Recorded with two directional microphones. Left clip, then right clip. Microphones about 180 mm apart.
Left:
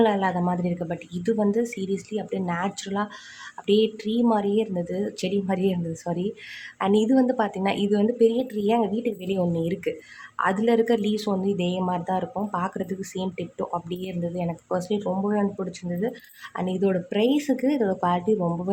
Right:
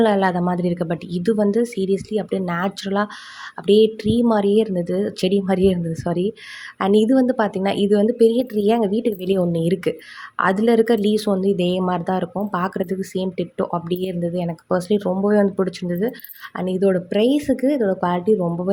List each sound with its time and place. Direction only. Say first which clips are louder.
0.0 s speech: right 4 dB; 25° right (ahead or behind)